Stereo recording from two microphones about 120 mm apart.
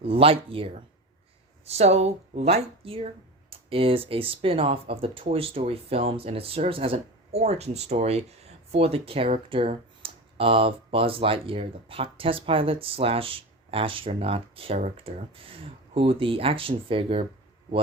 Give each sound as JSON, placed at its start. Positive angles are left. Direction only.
{"t": 0.0, "sound": "speech", "side_deg": -50}